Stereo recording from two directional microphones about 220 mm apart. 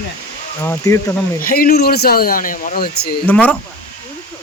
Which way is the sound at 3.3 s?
5° left (ahead or behind).